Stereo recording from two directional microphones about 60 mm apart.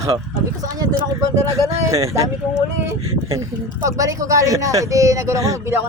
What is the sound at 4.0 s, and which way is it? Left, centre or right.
Speech, right.